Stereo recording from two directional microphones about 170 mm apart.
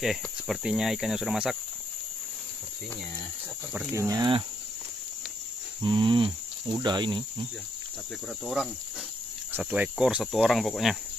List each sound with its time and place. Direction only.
0.0 s cricket: centre (ahead or behind)
3.9 s speech: 20° right (ahead or behind)
5.8 s cricket: 25° right (ahead or behind)
6.8 s speech: 25° right (ahead or behind)
8.6 s cricket: 5° right (ahead or behind)